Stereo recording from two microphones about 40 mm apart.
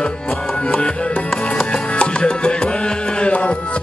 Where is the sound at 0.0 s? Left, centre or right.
Left.